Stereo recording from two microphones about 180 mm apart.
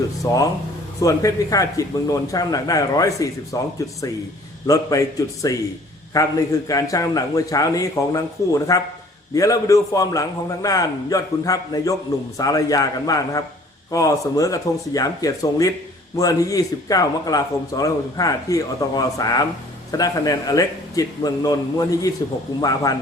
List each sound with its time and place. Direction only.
0.3 s a man's voice: 20° left (ahead or behind)